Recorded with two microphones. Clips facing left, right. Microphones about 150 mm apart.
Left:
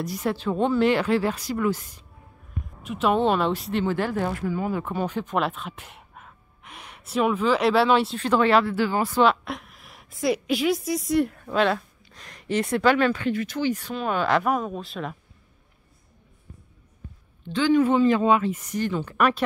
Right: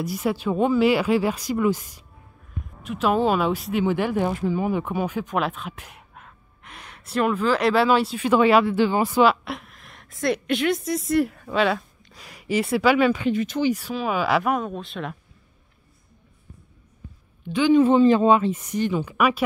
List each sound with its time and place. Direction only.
0.0 s speech: 5° right (ahead or behind)
2.8 s a woman's voice: centre (ahead or behind)
3.8 s a woman's voice: 15° right (ahead or behind)
9.2 s a woman's voice: 5° right (ahead or behind)
17.5 s speech: 15° right (ahead or behind)
17.8 s speech: 30° right (ahead or behind); by 19.4 s 5° right (ahead or behind)